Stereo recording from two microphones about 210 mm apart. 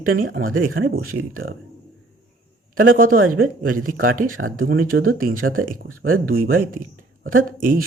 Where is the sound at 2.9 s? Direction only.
45° right (ahead or behind).